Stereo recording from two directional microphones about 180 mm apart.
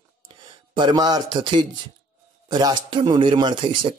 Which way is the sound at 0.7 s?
25° right (ahead or behind).